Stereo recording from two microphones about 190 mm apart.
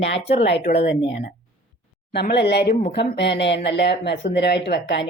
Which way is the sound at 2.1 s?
60° left (ahead or behind).